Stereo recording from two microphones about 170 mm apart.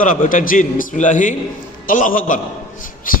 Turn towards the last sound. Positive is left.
turn(degrees=55)  # may be behind; listen again after turning